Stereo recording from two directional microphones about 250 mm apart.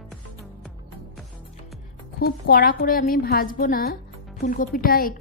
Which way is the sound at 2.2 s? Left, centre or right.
Left.